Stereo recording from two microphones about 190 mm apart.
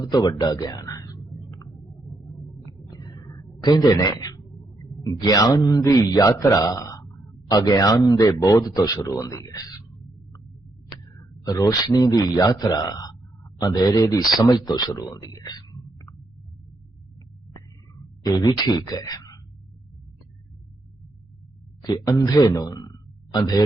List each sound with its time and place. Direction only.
0.0 s speech: 20° left (ahead or behind)
2.1 s a sound: centre (ahead or behind)
2.5 s a sound: 20° left (ahead or behind)
3.5 s a man's voice: 20° left (ahead or behind)
18.0 s speech: 20° left (ahead or behind)
21.8 s speech: 20° left (ahead or behind)